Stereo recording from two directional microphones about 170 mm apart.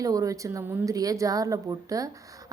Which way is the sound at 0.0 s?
20° right (ahead or behind).